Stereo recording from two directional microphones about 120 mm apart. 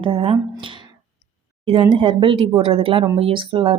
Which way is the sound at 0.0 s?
50° right (ahead or behind).